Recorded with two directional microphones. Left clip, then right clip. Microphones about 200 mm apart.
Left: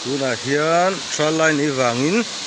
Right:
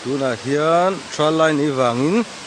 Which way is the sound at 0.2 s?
10° right (ahead or behind).